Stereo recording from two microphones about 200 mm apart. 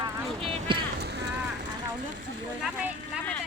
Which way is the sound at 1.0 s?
55° right (ahead or behind).